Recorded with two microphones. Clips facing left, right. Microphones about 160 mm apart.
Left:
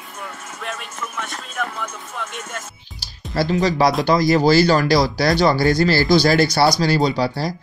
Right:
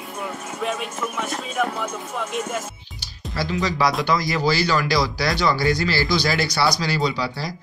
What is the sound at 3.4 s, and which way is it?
Speech, 35° left (ahead or behind).